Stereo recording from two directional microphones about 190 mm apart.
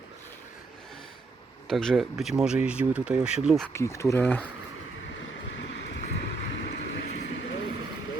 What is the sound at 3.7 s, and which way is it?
Speech, 15° left (ahead or behind).